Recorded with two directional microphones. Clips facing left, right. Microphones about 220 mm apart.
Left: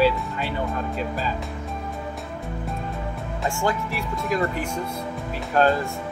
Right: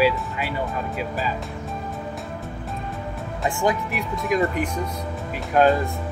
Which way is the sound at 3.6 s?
15° right (ahead or behind).